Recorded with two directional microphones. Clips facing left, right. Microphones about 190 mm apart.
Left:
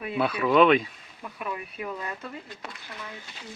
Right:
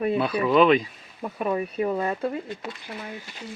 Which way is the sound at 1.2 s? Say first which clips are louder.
Right 9 dB; 40° right (ahead or behind).